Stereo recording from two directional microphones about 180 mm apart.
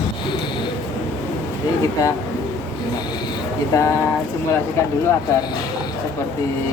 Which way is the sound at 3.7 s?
20° left (ahead or behind).